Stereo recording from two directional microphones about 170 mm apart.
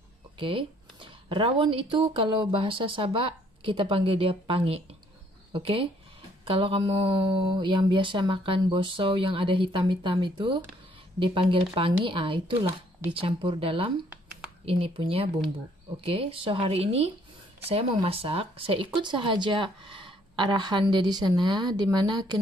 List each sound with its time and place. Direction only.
0.4 s speech: 30° right (ahead or behind)